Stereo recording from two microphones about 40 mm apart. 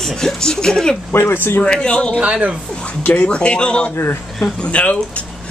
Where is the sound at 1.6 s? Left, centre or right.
Left.